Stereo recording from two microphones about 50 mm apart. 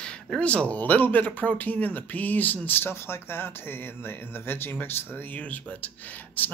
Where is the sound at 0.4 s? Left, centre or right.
Left.